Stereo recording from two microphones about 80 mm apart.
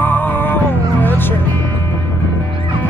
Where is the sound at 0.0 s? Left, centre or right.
Left.